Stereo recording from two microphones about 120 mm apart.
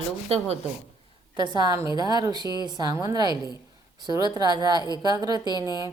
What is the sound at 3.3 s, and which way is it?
Speech, 35° left (ahead or behind).